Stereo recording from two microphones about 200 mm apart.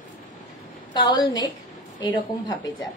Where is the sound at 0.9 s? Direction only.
25° left (ahead or behind).